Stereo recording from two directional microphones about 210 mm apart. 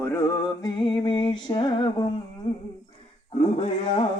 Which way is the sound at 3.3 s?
30° left (ahead or behind).